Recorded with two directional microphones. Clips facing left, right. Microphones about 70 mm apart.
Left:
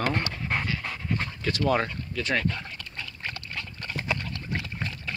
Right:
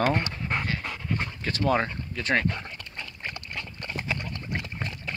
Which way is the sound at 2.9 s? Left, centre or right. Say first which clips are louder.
Even; centre.